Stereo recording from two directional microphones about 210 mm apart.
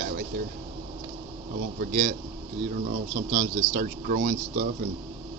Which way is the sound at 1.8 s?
40° right (ahead or behind).